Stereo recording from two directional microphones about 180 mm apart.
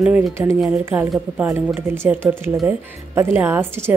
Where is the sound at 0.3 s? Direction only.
15° right (ahead or behind).